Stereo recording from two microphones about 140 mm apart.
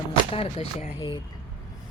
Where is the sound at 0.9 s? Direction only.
35° left (ahead or behind).